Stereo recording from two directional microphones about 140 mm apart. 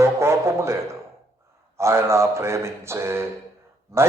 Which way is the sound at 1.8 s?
20° right (ahead or behind).